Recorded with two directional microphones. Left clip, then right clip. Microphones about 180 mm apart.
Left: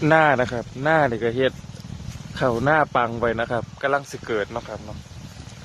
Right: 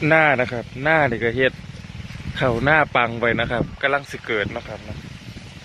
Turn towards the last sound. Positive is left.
turn(degrees=5)  # may be behind; listen again after turning